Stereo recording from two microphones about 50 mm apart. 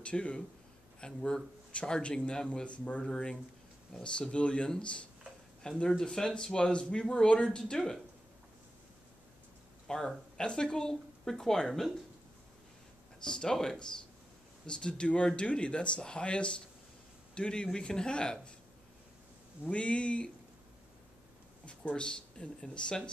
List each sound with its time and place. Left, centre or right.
0.0 s speech: left
9.8 s speech: centre
13.2 s speech: centre
19.7 s speech: left
21.6 s speech: centre